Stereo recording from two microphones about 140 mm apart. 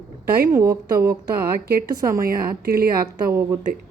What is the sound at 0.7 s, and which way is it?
Speech, 90° right.